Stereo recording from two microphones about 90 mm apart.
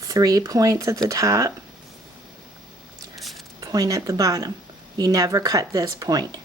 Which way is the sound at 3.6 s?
45° right (ahead or behind).